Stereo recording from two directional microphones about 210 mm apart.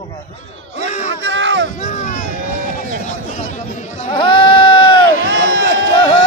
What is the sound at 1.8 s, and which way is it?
Speech, 35° left (ahead or behind).